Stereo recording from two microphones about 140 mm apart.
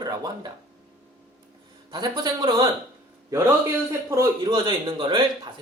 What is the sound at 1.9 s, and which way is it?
Speech, 30° right (ahead or behind).